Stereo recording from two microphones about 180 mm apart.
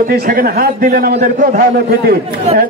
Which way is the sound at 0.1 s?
55° right (ahead or behind).